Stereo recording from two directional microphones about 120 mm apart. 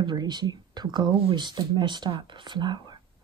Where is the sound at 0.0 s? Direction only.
35° right (ahead or behind).